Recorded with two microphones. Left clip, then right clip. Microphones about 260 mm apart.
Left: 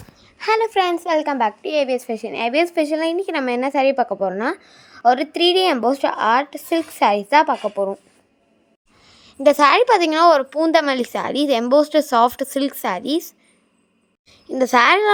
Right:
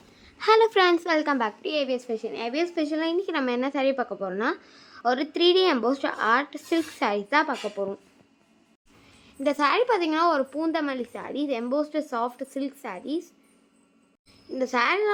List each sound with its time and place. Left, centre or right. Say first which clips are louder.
0.3 s a woman's voice: left 1 dB; centre
9.0 s a woman's voice: left 12 dB; left